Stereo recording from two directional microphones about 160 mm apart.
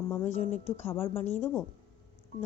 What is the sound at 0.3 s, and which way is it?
A woman's voice, 45° left (ahead or behind).